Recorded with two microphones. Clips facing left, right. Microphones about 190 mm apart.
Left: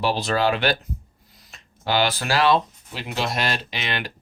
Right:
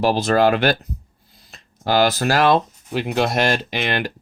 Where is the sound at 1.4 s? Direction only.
35° right (ahead or behind).